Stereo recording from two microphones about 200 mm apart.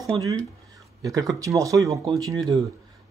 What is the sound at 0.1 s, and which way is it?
Speech, 15° right (ahead or behind).